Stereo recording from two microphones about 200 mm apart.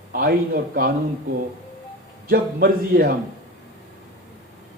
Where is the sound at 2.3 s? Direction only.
50° right (ahead or behind).